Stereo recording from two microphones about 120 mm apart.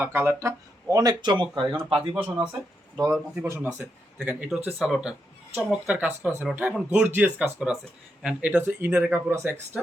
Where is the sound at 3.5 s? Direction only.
15° right (ahead or behind).